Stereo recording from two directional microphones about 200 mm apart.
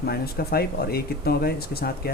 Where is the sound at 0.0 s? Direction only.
50° left (ahead or behind).